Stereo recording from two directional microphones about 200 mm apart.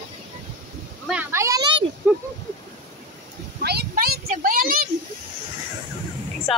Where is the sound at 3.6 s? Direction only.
55° right (ahead or behind).